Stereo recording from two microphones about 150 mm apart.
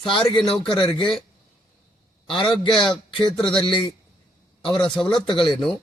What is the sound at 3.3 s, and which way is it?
A man's voice, 5° left (ahead or behind).